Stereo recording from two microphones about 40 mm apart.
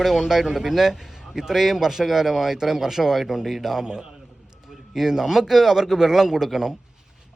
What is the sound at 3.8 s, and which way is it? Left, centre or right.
A man's voice, centre.